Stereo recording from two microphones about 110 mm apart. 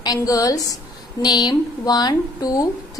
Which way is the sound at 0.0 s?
35° left (ahead or behind).